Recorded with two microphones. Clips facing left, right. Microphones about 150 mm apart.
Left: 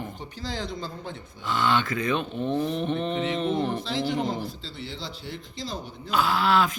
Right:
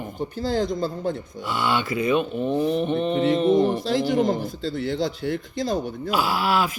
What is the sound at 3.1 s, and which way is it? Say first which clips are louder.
Speech: right 7 dB; 40° right (ahead or behind).